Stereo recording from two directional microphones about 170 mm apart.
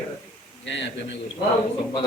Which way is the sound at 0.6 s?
90° left.